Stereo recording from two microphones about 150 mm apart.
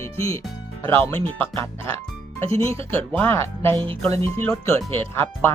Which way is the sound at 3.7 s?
35° right (ahead or behind).